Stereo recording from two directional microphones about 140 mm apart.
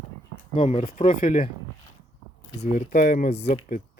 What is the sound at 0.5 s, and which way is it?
Speech, 65° left (ahead or behind).